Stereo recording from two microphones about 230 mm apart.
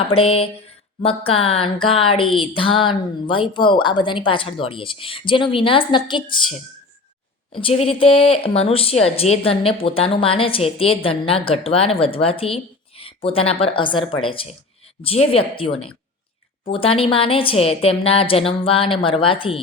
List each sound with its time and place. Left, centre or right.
0.1 s speech: left
7.5 s speech: left
16.7 s speech: left